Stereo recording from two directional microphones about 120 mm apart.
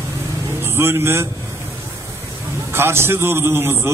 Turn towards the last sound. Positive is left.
turn(degrees=-20)  # may be behind; listen again after turning